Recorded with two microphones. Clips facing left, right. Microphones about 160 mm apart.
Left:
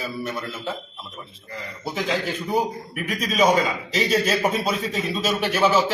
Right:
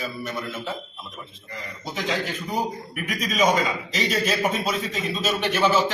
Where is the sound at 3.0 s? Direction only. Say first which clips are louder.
Left 2 dB; 30° left (ahead or behind).